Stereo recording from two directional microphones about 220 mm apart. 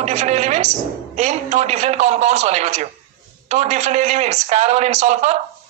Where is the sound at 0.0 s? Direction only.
30° right (ahead or behind).